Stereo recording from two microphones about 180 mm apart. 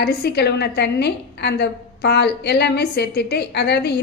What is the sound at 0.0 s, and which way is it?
A woman's voice, 60° left (ahead or behind).